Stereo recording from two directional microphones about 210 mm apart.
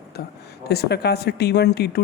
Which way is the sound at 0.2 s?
45° left (ahead or behind).